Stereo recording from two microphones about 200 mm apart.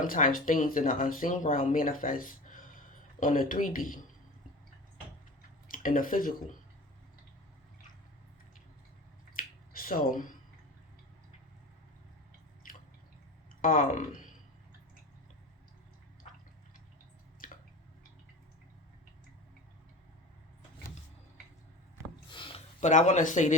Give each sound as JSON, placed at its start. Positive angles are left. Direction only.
{"t": 0.0, "sound": "speech", "side_deg": 45}
{"t": 5.6, "sound": "speech", "side_deg": 45}
{"t": 9.3, "sound": "finger snapping", "side_deg": 45}
{"t": 13.6, "sound": "speech", "side_deg": 45}
{"t": 17.4, "sound": "drip", "side_deg": 40}
{"t": 22.3, "sound": "a sound", "side_deg": 25}